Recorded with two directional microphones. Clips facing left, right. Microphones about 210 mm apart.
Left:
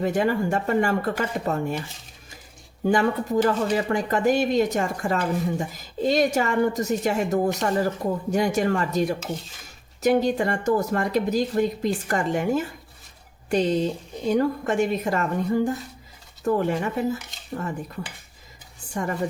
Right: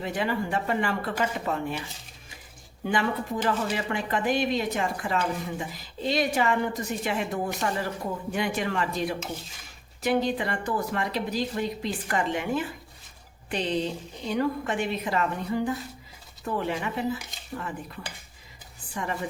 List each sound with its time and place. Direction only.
0.0 s speech: 45° left (ahead or behind)
2.8 s speech: 45° left (ahead or behind)